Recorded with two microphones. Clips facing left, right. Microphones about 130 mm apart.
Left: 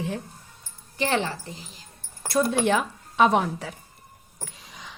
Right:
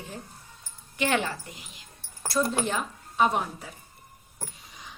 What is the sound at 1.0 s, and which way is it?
Speech, 30° left (ahead or behind).